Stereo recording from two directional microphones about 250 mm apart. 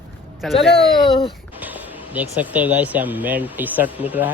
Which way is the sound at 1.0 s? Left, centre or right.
Centre.